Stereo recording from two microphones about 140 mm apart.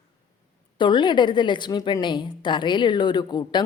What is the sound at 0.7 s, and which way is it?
A woman's voice, 35° left (ahead or behind).